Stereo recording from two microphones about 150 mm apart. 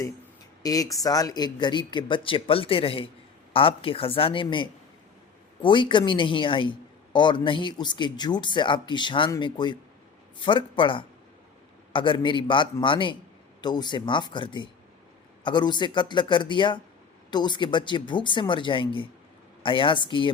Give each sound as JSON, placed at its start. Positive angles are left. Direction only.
{"t": 0.6, "sound": "speech", "side_deg": 25}